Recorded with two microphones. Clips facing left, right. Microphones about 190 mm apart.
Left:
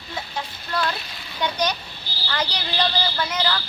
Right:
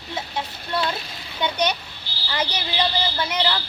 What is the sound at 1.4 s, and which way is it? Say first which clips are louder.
Speech: right 1 dB; 25° right (ahead or behind).